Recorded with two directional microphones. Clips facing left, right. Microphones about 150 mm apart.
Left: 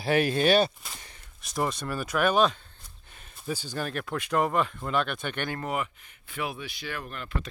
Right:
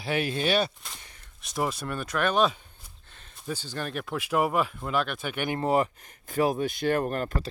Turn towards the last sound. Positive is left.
turn(degrees=-45)  # may be behind; listen again after turning